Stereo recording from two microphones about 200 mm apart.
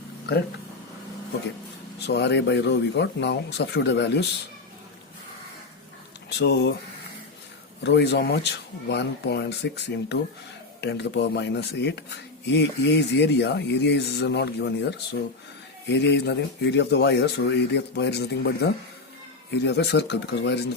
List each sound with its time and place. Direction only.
2.0 s speech: 60° left (ahead or behind)
6.4 s speech: 55° left (ahead or behind)
7.9 s speech: 55° left (ahead or behind)